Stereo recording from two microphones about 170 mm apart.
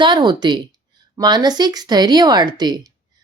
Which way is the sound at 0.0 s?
25° right (ahead or behind).